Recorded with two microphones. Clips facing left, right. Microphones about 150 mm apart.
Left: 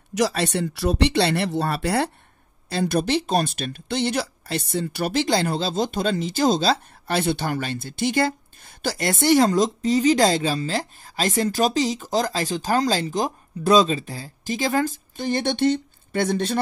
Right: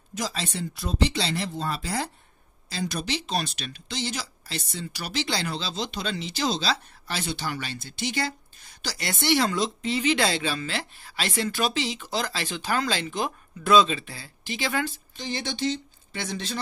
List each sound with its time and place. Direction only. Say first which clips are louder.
0.1 s speech: left 10 dB; 70° left (ahead or behind); by 16.5 s 50° left (ahead or behind)